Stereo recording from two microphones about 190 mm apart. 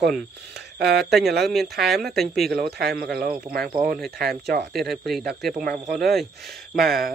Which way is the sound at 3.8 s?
5° right (ahead or behind).